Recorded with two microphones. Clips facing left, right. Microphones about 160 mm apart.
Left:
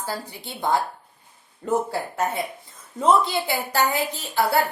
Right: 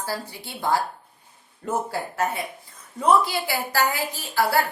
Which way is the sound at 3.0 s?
25° left (ahead or behind).